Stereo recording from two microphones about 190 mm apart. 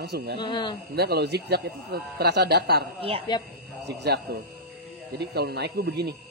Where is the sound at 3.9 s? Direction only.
60° right (ahead or behind).